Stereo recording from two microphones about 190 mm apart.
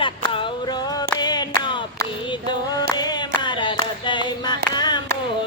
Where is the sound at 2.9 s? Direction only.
25° left (ahead or behind).